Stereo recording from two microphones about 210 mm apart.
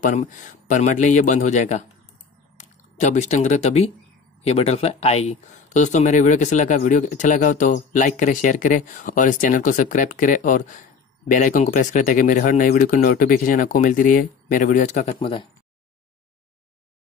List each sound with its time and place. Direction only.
0.0 s speech: 40° left (ahead or behind)